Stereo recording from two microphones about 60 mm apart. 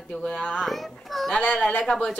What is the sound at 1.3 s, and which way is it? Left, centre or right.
Speech, centre.